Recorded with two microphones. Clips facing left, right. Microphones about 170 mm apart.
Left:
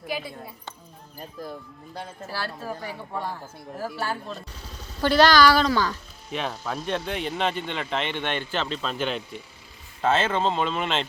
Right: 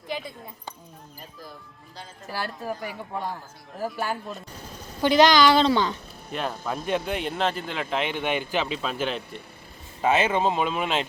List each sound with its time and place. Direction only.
2.3 s a woman's voice: 15° right (ahead or behind)
6.3 s speech: centre (ahead or behind)
10.0 s speech: 15° right (ahead or behind)